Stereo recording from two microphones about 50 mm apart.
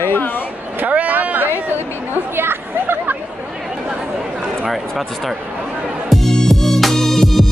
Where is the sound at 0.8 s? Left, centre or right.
Right.